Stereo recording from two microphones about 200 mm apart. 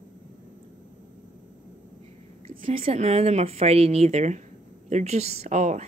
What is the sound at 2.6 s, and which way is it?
Speech, 30° right (ahead or behind).